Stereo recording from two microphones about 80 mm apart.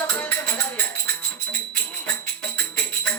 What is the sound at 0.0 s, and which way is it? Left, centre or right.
Music, centre.